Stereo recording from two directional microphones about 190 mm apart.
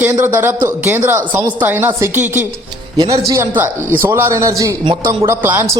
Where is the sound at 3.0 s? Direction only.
20° right (ahead or behind).